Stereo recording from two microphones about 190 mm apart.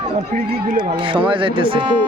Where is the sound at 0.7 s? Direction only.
25° right (ahead or behind).